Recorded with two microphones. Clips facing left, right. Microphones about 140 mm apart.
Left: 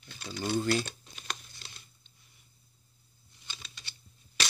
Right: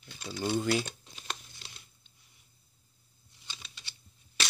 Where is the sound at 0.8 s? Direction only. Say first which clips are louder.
Even; 20° right (ahead or behind).